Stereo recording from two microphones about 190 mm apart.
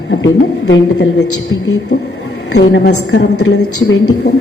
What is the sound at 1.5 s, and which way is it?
Speech, 80° left.